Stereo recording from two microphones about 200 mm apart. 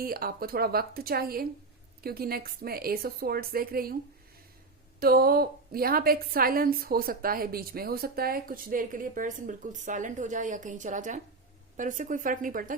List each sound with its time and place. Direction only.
0.0 s a woman's voice: 45° right (ahead or behind)
4.9 s a woman's voice: 50° right (ahead or behind)